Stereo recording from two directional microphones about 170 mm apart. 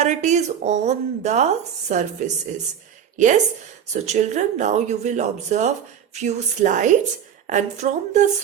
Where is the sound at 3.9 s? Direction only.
45° right (ahead or behind).